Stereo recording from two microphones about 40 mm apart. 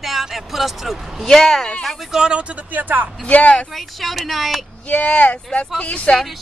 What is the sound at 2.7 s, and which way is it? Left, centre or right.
Speech, right.